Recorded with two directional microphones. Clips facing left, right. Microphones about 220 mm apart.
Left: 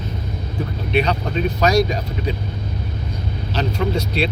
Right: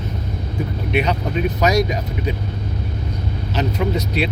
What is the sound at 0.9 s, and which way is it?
Speech, 20° right (ahead or behind).